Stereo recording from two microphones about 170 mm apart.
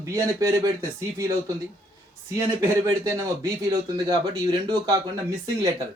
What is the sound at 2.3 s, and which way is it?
Speech, 20° right (ahead or behind).